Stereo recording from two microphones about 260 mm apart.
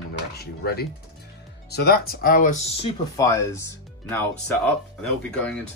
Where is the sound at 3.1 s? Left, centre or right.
Centre.